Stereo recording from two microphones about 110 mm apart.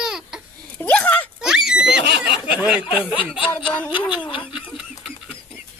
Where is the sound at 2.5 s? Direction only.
5° right (ahead or behind).